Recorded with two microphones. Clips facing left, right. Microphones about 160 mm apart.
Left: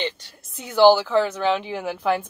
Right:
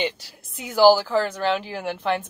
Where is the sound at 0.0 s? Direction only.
Centre (ahead or behind).